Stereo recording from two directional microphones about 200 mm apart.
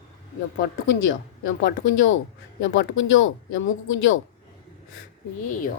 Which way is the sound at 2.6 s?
75° left (ahead or behind).